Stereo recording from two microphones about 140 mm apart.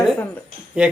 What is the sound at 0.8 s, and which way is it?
Speech, 10° right (ahead or behind).